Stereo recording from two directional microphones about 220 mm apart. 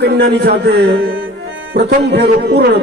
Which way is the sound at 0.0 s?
50° right (ahead or behind).